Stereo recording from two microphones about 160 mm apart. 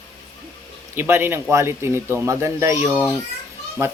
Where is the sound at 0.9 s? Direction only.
15° right (ahead or behind).